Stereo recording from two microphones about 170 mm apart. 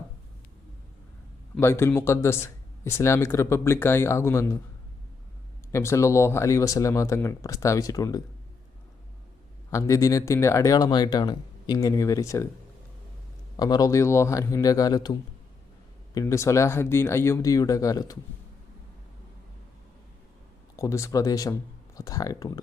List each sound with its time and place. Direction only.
1.5 s speech: 15° left (ahead or behind)
5.7 s speech: 15° left (ahead or behind)
9.6 s speech: 15° left (ahead or behind)
13.6 s speech: 25° left (ahead or behind)
16.1 s speech: 15° left (ahead or behind)
20.7 s speech: 20° left (ahead or behind)